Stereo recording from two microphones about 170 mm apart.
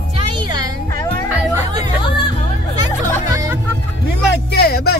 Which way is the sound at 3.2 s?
20° right (ahead or behind).